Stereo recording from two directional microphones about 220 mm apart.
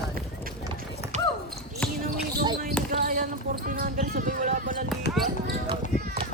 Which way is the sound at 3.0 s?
35° right (ahead or behind).